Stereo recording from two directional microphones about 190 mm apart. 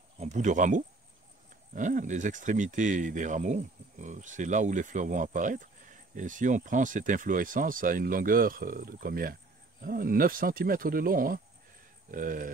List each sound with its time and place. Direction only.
0.2 s speech: 40° right (ahead or behind)